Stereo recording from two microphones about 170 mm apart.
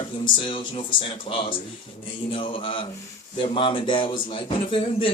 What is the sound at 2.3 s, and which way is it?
A woman's voice, 30° left (ahead or behind).